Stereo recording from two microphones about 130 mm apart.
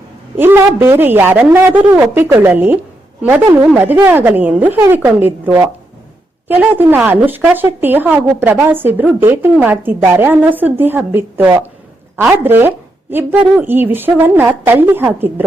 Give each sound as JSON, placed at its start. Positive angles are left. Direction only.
{"t": 0.3, "sound": "speech", "side_deg": -15}
{"t": 3.8, "sound": "speech", "side_deg": -15}